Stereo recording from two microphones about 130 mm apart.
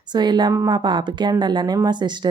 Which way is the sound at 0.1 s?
35° right (ahead or behind).